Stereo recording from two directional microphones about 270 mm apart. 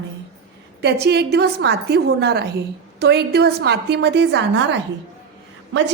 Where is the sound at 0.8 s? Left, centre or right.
Right.